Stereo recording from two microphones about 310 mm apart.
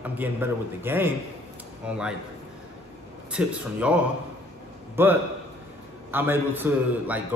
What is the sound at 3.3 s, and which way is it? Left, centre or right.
Speech, centre.